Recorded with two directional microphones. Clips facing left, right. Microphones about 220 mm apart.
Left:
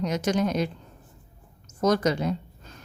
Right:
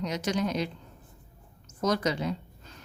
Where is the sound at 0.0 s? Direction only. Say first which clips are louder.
Left 4 dB; 50° left (ahead or behind).